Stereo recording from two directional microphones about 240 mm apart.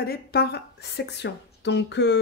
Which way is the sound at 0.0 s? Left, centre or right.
Left.